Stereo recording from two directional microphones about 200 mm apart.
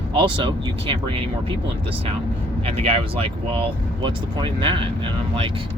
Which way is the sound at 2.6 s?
30° right (ahead or behind).